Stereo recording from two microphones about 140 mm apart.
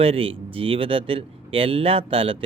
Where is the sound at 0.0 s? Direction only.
40° right (ahead or behind).